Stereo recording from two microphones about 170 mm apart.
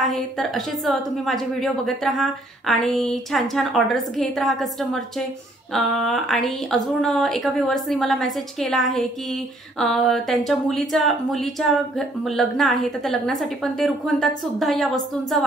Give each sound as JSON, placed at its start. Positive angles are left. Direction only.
{"t": 0.0, "sound": "speech", "side_deg": 0}